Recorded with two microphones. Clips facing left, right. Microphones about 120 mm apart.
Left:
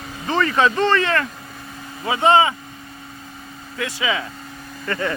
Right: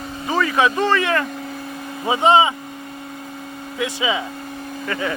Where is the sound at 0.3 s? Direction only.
5° right (ahead or behind).